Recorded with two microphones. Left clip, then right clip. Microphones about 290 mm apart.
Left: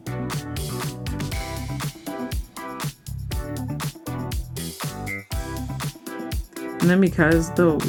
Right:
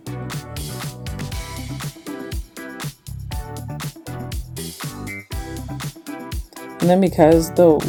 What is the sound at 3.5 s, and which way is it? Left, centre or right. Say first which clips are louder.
Music: left 2 dB; centre.